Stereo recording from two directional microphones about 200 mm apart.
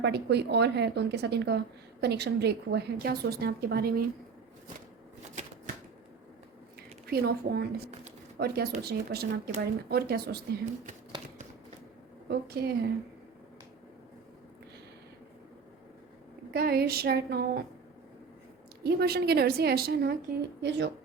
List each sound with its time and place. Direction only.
0.0 s speech: 55° right (ahead or behind)
5.3 s shuffling cards: 35° right (ahead or behind)
7.1 s a woman's voice: 50° right (ahead or behind)
12.3 s a woman's voice: 50° right (ahead or behind)
16.5 s a woman's voice: 50° right (ahead or behind)
18.8 s a woman's voice: 50° right (ahead or behind)